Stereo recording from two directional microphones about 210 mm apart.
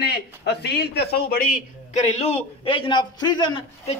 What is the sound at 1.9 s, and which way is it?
A man's voice, 30° left (ahead or behind).